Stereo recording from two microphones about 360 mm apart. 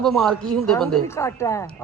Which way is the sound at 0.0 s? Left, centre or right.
Centre.